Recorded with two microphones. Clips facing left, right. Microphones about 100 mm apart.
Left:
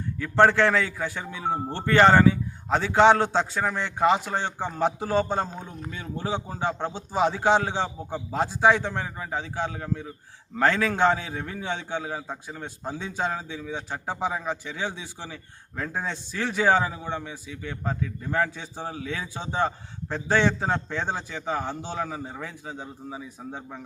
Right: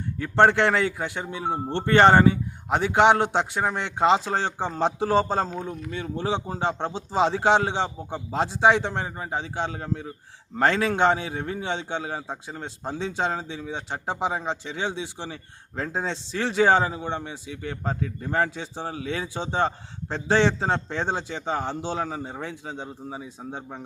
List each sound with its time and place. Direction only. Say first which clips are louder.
0.2 s a man's voice: even; 25° right (ahead or behind)
18.5 s a man's voice: right 2 dB; 25° right (ahead or behind)